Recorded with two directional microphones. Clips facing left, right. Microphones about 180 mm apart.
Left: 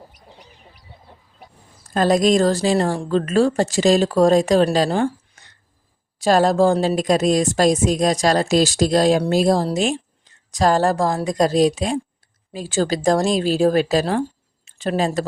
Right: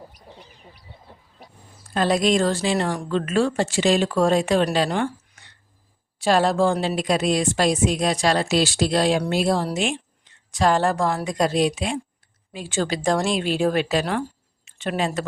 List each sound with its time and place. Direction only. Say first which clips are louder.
1.9 s a woman's voice: left 4 dB; 45° left (ahead or behind)